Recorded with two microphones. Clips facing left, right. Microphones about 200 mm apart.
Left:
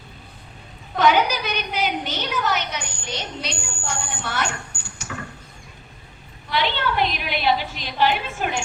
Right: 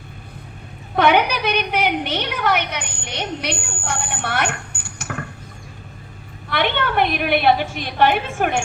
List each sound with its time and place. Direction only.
0.9 s a woman's voice: 60° right (ahead or behind)
6.5 s a woman's voice: 60° right (ahead or behind)